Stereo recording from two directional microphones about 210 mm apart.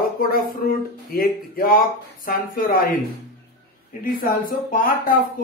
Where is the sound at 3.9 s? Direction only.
40° left (ahead or behind).